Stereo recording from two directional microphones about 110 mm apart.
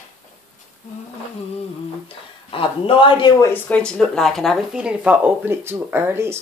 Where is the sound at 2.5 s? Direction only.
55° left (ahead or behind).